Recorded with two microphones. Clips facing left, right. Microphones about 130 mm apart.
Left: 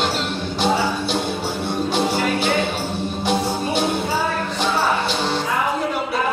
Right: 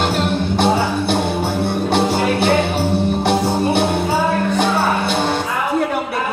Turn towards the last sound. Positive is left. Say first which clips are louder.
# right 3 dB
turn(degrees=-55)  # may be behind; listen again after turning